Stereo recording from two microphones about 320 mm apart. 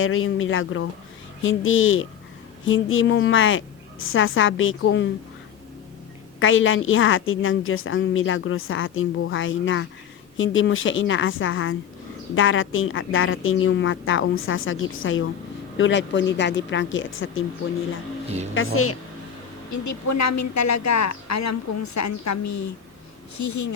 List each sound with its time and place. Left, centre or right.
0.0 s a woman's voice: left
6.4 s a woman's voice: left
18.5 s a woman's voice: left
19.7 s speech: left